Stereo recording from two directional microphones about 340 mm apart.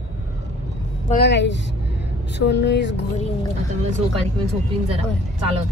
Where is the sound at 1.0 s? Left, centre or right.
Left.